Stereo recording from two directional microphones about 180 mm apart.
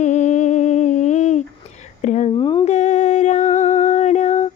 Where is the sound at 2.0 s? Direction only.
40° left (ahead or behind).